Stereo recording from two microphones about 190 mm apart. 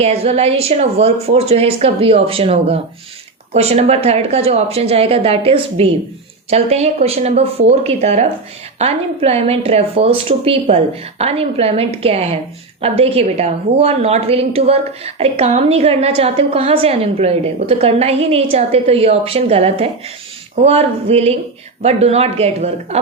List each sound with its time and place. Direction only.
0.0 s a woman's voice: 35° right (ahead or behind)